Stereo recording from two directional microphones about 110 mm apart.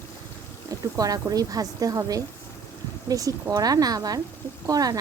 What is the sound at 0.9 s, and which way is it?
A woman's voice, 35° right (ahead or behind).